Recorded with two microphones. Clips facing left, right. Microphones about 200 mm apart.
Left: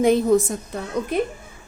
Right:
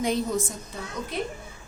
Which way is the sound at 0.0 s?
55° left (ahead or behind).